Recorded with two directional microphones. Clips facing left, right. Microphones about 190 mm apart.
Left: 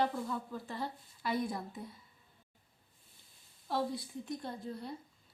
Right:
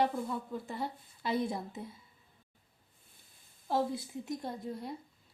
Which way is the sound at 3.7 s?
25° right (ahead or behind).